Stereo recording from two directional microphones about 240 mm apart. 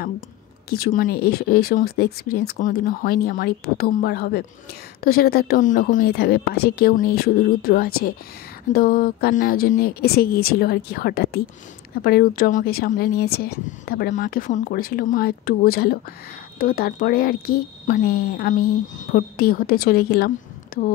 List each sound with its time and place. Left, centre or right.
0.7 s speech: left